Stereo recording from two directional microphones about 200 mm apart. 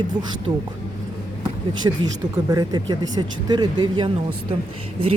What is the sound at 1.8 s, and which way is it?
Speech, 20° right (ahead or behind).